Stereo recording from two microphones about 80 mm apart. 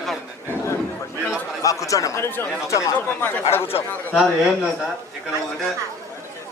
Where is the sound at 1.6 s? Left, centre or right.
Left.